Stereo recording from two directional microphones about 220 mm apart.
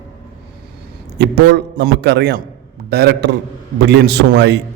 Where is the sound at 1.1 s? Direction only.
50° right (ahead or behind).